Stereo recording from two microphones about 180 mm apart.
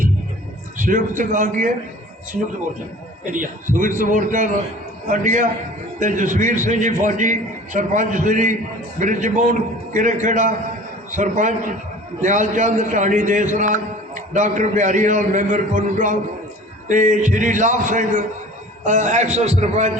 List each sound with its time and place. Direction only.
0.8 s a man's voice: 45° right (ahead or behind)
3.2 s a man's voice: 45° right (ahead or behind)